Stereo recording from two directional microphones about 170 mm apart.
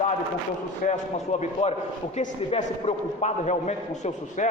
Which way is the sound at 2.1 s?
40° left (ahead or behind).